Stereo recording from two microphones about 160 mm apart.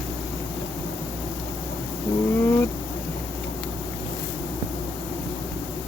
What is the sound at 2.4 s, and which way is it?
Insect, 15° left (ahead or behind).